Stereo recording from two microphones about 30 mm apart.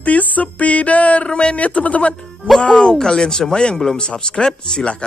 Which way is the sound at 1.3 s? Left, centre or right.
Left.